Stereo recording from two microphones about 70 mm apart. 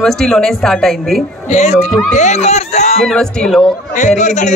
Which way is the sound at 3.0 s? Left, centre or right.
Centre.